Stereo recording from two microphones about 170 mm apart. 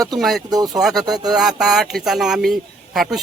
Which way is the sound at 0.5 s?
20° right (ahead or behind).